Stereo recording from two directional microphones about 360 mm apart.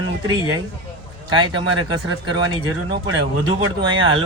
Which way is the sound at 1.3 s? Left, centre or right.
Centre.